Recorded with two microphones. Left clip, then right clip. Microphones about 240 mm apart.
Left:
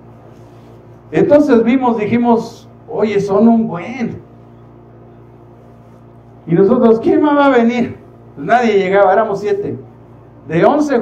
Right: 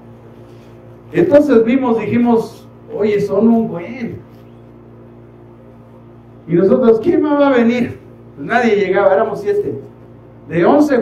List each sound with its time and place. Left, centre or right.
1.1 s a man's voice: left
6.4 s a man's voice: left